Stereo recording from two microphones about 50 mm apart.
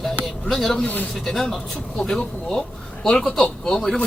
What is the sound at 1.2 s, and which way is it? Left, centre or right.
Speech, centre.